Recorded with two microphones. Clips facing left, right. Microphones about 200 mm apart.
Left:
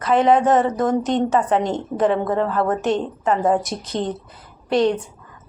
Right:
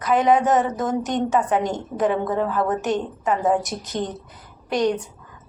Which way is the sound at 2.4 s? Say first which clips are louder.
Left 2 dB; centre (ahead or behind).